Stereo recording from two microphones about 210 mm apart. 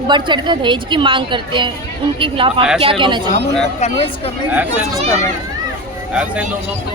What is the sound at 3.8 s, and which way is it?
Speech, 25° left (ahead or behind).